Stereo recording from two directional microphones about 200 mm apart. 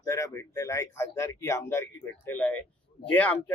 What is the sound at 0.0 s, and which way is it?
A man's voice, 15° left (ahead or behind).